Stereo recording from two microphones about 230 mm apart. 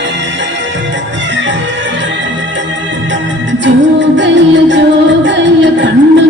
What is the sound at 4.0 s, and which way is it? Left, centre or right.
Music, right.